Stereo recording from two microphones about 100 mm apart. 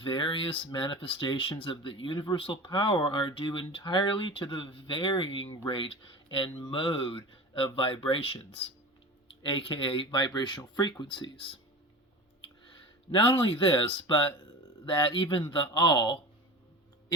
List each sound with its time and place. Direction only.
0.0 s speech: 55° left (ahead or behind); by 8.5 s 70° left (ahead or behind)
9.4 s speech: 60° left (ahead or behind)
13.1 s speech: 60° left (ahead or behind)
15.7 s speech: 45° left (ahead or behind)